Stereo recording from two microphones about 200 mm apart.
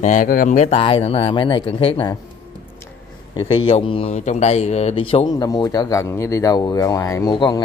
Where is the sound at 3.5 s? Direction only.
25° left (ahead or behind).